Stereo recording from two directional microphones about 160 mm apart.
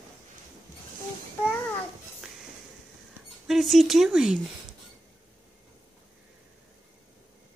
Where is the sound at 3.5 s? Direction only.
Centre (ahead or behind).